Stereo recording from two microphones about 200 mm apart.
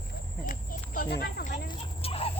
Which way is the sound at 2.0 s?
30° left (ahead or behind).